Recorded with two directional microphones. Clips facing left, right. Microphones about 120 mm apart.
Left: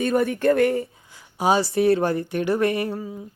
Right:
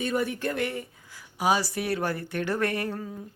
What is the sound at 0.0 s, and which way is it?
Speech, 50° left (ahead or behind).